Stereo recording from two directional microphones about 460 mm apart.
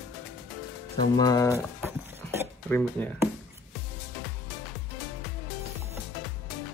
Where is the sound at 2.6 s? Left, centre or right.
Centre.